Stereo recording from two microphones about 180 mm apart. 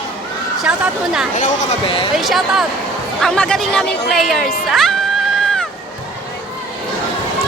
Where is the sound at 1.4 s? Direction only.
40° left (ahead or behind).